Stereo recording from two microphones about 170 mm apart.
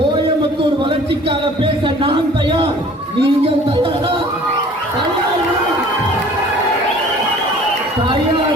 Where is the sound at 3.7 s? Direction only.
25° right (ahead or behind).